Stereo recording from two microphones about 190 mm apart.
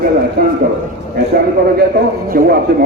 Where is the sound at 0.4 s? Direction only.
50° right (ahead or behind).